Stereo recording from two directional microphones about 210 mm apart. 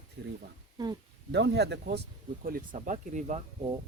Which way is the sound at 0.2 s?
50° right (ahead or behind).